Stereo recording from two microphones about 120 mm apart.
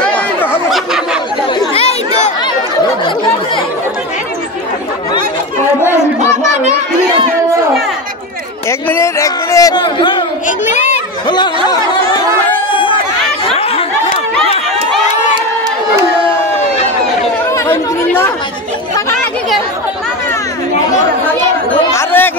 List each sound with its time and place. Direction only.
1.7 s chatter: 60° left (ahead or behind)
8.6 s a sound: 20° left (ahead or behind)
9.9 s chatter: 40° left (ahead or behind)
10.7 s children playing: 80° left
11.9 s chatter: 40° left (ahead or behind)
17.6 s chatter: 20° left (ahead or behind)
21.9 s chatter: 15° left (ahead or behind)